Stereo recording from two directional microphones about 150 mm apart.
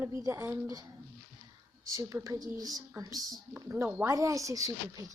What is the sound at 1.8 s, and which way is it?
Speech, 20° right (ahead or behind).